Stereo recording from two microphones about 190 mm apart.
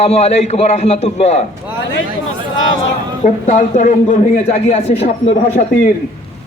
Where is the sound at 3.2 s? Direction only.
40° left (ahead or behind).